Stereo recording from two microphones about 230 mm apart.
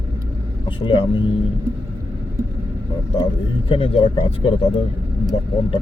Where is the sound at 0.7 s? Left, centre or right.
Left.